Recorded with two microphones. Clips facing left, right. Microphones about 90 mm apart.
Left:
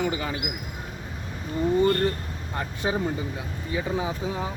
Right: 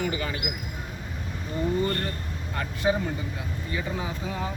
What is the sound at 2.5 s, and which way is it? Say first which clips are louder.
Speech: right 2 dB; 25° left (ahead or behind).